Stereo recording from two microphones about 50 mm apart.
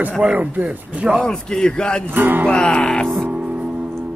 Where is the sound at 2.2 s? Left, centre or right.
Right.